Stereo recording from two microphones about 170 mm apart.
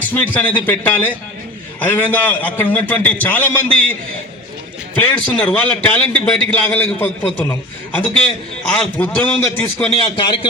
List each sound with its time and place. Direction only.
0.0 s a man's voice: 10° left (ahead or behind)
4.9 s a man's voice: 10° left (ahead or behind)
9.0 s a man's voice: 10° left (ahead or behind)
10.0 s a man's voice: 30° left (ahead or behind)